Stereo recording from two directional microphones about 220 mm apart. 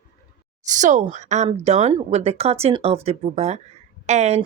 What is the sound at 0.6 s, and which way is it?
Speech, 35° right (ahead or behind).